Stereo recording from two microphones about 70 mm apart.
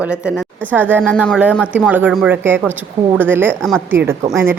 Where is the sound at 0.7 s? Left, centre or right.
Right.